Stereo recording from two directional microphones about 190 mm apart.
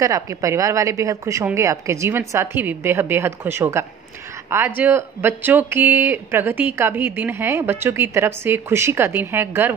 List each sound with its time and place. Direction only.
0.0 s speech: 15° right (ahead or behind)